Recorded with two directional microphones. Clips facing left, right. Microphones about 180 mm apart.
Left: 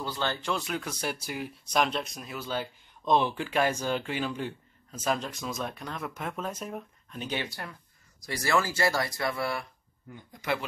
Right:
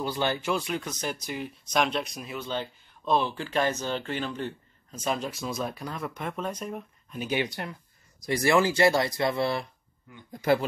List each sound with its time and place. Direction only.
0.0 s speech: 15° right (ahead or behind)
10.3 s speech: 35° right (ahead or behind)